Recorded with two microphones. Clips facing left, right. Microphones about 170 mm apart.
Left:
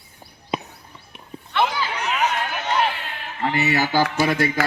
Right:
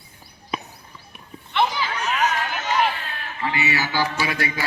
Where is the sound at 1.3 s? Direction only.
35° left (ahead or behind).